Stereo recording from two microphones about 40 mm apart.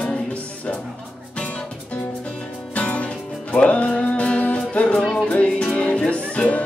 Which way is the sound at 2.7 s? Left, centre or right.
Left.